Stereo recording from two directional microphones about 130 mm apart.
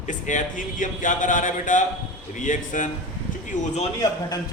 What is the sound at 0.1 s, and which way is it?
A man's voice, 80° left.